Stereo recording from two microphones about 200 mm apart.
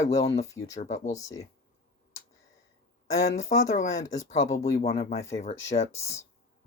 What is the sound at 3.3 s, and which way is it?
Speech, 35° left (ahead or behind).